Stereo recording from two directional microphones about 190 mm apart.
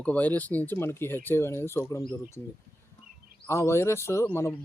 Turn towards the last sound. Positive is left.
turn(degrees=15)  # may be behind; listen again after turning